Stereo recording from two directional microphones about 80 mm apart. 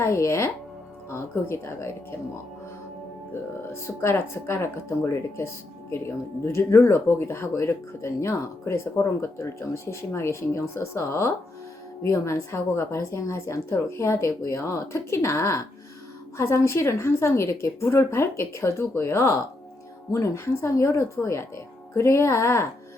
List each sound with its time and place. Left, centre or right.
0.0 s speech: left
3.7 s speech: left
6.4 s speech: left